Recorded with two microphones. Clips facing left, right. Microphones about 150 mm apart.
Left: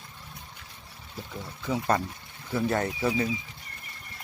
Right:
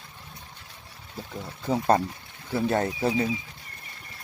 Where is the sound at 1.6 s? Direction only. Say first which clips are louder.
Right 4 dB; 40° right (ahead or behind).